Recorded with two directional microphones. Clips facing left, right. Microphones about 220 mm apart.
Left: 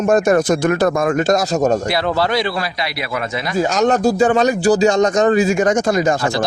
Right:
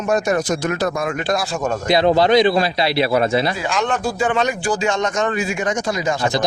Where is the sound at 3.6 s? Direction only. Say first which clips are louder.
Left 6 dB; 40° left (ahead or behind).